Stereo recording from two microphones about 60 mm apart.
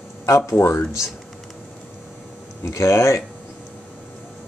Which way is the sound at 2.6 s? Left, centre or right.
Left.